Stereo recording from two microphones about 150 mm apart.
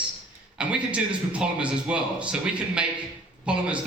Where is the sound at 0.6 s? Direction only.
5° right (ahead or behind).